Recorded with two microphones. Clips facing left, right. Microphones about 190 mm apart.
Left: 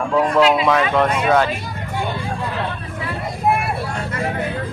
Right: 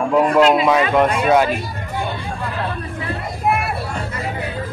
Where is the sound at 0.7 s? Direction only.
10° right (ahead or behind).